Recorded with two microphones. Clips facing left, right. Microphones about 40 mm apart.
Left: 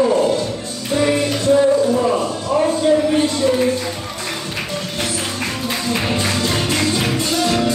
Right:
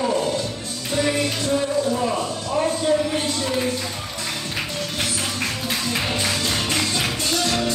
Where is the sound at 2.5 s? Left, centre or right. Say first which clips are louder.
Left 6 dB; left.